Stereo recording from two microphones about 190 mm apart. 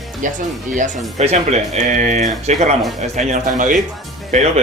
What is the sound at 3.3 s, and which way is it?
Mantra, 40° right (ahead or behind).